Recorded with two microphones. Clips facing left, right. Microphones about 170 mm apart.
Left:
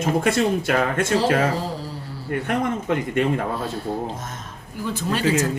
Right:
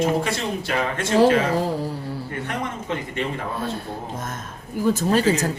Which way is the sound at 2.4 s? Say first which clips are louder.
Left 7 dB; 50° left (ahead or behind).